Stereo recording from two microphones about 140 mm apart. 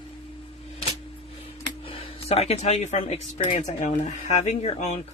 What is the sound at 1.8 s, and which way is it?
Speech, 45° left (ahead or behind).